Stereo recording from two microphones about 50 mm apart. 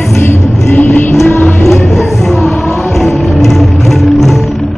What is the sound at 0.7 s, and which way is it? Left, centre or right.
Music, left.